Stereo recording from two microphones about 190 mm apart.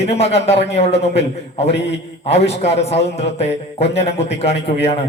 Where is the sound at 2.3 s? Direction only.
35° left (ahead or behind).